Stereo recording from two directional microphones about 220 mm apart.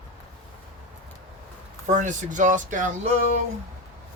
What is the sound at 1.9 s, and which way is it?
Speech, 35° right (ahead or behind).